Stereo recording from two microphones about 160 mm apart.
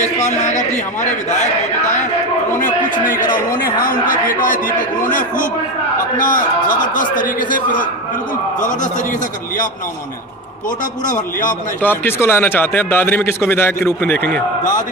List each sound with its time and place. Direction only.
0.2 s a man's voice: 50° left (ahead or behind)
2.6 s a man's voice: 55° left (ahead or behind)
11.1 s a man's voice: 50° left (ahead or behind)
11.8 s a man's voice: 10° left (ahead or behind)